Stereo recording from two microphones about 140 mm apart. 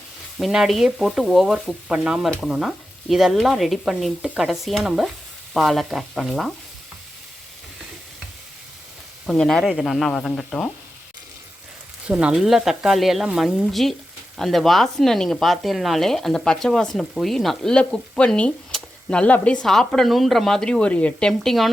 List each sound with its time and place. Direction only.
0.3 s speech: centre (ahead or behind)
9.2 s speech: 5° left (ahead or behind)
12.0 s speech: 10° right (ahead or behind)